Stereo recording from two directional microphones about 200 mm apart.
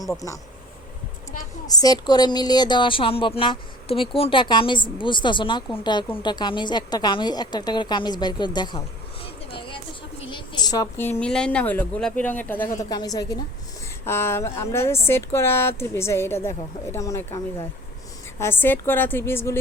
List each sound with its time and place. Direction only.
1.6 s a woman's voice: 20° left (ahead or behind)
9.2 s a sound: 25° left (ahead or behind)
10.2 s a woman's voice: 20° left (ahead or behind)